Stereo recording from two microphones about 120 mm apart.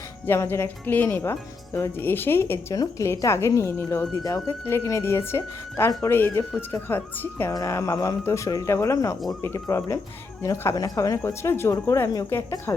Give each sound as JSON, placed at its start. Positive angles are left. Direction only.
{"t": 0.3, "sound": "speech", "side_deg": 20}
{"t": 7.5, "sound": "speech", "side_deg": 25}